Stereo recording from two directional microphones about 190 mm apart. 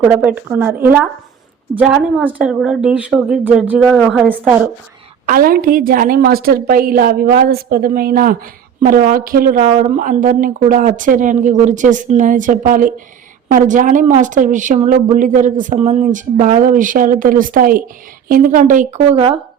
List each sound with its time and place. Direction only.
0.0 s a woman's voice: 5° right (ahead or behind)
5.2 s a woman's voice: 50° right (ahead or behind)
19.1 s speech: 30° right (ahead or behind)